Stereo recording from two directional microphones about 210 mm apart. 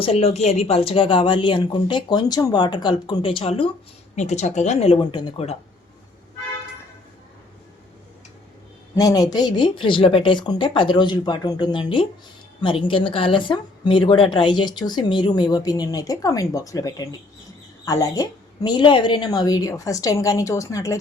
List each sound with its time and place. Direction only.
0.0 s speech: 30° left (ahead or behind)
9.0 s a woman's voice: 15° left (ahead or behind)